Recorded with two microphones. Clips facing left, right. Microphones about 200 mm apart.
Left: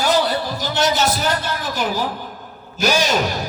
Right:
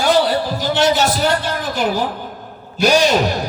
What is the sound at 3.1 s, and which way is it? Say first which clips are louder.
Speech: right 4 dB; 45° right (ahead or behind).